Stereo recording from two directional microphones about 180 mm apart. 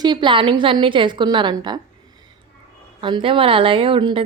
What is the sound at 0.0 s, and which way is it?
Speech, 25° right (ahead or behind).